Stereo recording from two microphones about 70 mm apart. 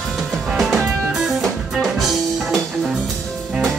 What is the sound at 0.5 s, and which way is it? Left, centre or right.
Music, centre.